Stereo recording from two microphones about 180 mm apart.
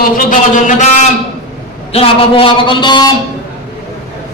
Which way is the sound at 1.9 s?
30° left (ahead or behind).